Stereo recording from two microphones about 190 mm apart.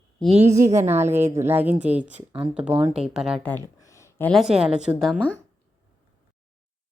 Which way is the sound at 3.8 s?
15° left (ahead or behind).